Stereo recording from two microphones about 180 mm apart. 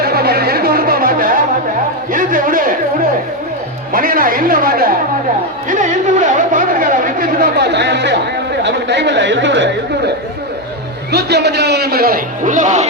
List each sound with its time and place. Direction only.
0.0 s music: 60° right (ahead or behind)
2.1 s a sound: 50° right (ahead or behind)
3.9 s a man's voice: 50° right (ahead or behind)
5.6 s chatter: 45° right (ahead or behind); by 8.2 s 70° right (ahead or behind)
8.6 s speech: 75° right (ahead or behind)
11.1 s a man's voice: 65° right (ahead or behind); by 12.9 s 40° right (ahead or behind)